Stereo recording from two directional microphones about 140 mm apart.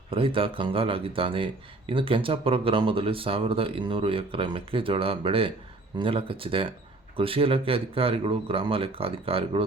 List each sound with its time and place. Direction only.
0.1 s speech: 40° right (ahead or behind)